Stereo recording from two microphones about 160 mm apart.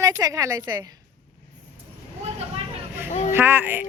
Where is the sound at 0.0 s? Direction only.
20° right (ahead or behind).